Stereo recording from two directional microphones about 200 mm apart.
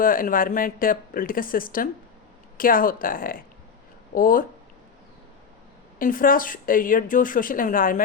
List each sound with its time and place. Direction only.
0.0 s speech: 45° left (ahead or behind)
6.0 s speech: 45° left (ahead or behind)